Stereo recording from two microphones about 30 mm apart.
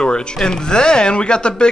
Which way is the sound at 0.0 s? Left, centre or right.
Left.